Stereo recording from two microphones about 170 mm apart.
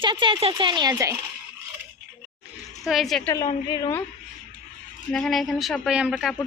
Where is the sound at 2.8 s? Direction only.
Centre (ahead or behind).